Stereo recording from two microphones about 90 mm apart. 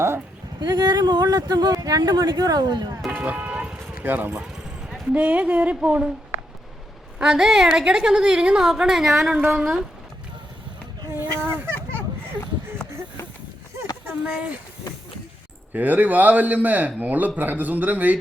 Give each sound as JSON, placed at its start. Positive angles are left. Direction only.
{"t": 0.6, "sound": "speech", "side_deg": -50}
{"t": 3.1, "sound": "music", "side_deg": -20}
{"t": 4.0, "sound": "a sound", "side_deg": -20}
{"t": 5.1, "sound": "a woman's voice", "side_deg": -15}
{"t": 11.1, "sound": "speech", "side_deg": -25}
{"t": 14.1, "sound": "speech", "side_deg": -15}
{"t": 15.7, "sound": "a man's voice", "side_deg": -20}